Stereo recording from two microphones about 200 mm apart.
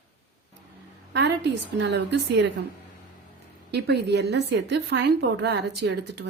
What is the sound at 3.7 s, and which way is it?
A woman's voice, 55° right (ahead or behind).